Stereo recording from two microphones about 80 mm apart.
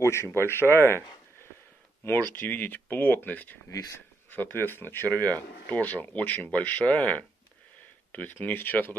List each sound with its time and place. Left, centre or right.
0.0 s speech: left
2.0 s speech: left